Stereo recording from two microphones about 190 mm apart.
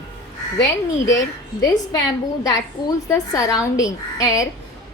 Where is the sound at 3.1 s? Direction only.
15° left (ahead or behind).